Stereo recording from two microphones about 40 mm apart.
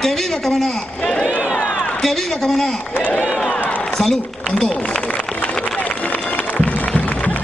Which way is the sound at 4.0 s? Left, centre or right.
Centre.